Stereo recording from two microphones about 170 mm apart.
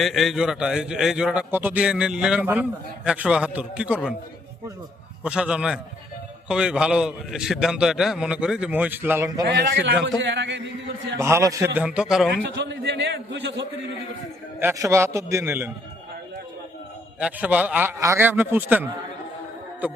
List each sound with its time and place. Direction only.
0.0 s a man's voice: centre (ahead or behind)
5.2 s a man's voice: 5° right (ahead or behind)
9.5 s a man's voice: 85° right
11.2 s a man's voice: 15° right (ahead or behind)
12.6 s a man's voice: 90° right
14.6 s a man's voice: 15° right (ahead or behind)
17.2 s a man's voice: 10° right (ahead or behind)